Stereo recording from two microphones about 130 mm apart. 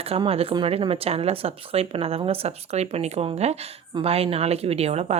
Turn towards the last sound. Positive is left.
turn(degrees=-55)  # may be behind; listen again after turning